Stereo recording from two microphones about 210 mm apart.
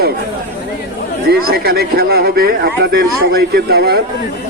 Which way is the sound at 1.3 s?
45° right (ahead or behind).